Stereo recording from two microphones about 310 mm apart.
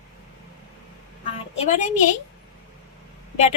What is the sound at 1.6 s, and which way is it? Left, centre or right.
Speech, left.